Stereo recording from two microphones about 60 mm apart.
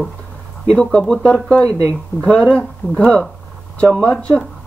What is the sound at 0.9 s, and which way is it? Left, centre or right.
Speech, centre.